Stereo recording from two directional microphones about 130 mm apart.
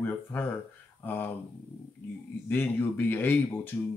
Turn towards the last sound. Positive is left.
turn(degrees=15)  # may be behind; listen again after turning